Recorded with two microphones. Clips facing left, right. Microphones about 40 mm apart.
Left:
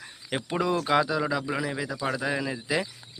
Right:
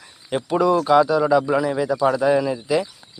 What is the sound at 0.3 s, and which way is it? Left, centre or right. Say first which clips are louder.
Speech: right 8 dB; centre.